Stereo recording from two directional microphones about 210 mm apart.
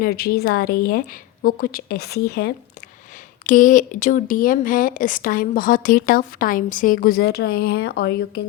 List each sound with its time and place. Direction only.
0.0 s a woman's voice: 45° left (ahead or behind)
3.4 s speech: 40° left (ahead or behind)